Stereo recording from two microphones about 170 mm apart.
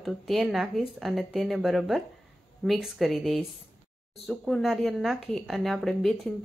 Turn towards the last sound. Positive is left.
turn(degrees=0)  # may be behind; listen again after turning